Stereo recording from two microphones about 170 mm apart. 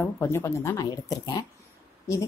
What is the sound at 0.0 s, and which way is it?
A woman's voice, 15° left (ahead or behind).